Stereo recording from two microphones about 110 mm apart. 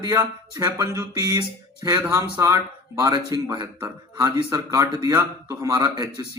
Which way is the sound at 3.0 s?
35° right (ahead or behind).